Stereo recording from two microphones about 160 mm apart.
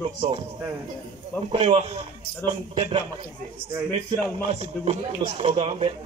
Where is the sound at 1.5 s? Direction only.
40° right (ahead or behind).